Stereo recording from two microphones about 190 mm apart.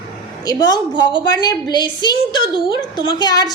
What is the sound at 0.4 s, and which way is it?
A child's voice, 20° left (ahead or behind).